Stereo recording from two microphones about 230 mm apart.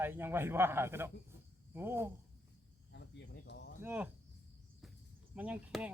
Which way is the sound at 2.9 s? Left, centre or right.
Left.